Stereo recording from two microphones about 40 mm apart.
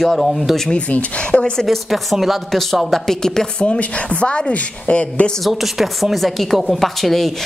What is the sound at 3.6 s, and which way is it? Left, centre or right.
A woman's voice, left.